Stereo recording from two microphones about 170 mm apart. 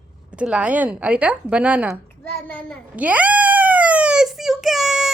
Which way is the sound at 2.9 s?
10° right (ahead or behind).